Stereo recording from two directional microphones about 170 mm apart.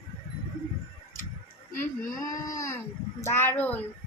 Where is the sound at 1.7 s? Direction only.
20° left (ahead or behind).